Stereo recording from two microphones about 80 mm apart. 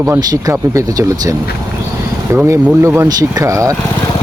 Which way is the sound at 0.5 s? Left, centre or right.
Right.